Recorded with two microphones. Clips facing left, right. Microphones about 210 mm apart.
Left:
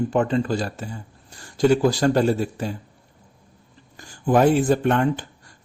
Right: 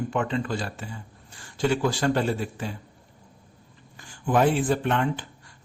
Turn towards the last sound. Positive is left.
turn(degrees=45)  # may be behind; listen again after turning